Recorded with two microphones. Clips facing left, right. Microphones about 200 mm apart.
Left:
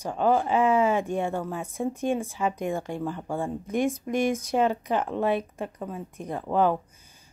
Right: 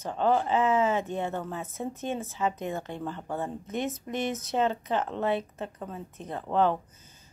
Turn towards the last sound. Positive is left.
turn(degrees=10)  # may be behind; listen again after turning